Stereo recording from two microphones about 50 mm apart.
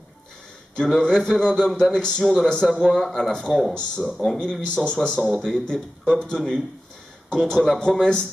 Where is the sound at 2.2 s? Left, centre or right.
Centre.